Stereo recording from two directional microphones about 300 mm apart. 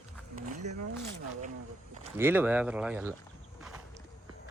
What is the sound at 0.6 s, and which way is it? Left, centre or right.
Speech, right.